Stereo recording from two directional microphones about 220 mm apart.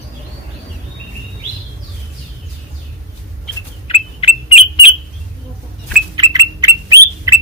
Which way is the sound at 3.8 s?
25° left (ahead or behind).